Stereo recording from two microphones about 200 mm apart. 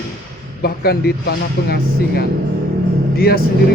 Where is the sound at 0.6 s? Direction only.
50° left (ahead or behind).